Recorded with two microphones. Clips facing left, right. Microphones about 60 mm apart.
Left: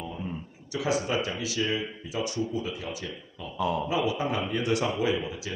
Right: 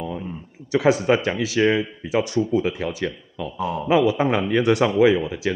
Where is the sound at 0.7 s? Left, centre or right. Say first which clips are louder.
Right 10 dB; right.